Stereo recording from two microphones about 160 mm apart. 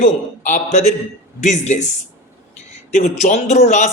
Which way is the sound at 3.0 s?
50° left (ahead or behind).